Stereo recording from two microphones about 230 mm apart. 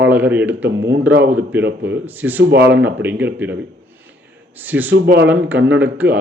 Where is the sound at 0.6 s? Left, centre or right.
Right.